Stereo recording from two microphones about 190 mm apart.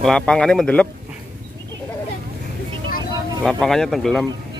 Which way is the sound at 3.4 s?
5° left (ahead or behind).